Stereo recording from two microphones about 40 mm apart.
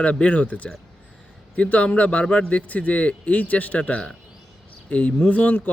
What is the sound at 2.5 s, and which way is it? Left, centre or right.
Speech, left.